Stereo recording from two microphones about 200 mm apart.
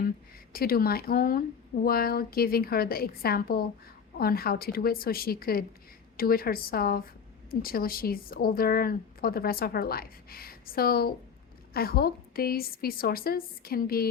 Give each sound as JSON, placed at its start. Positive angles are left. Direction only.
{"t": 0.5, "sound": "a woman's voice", "side_deg": 50}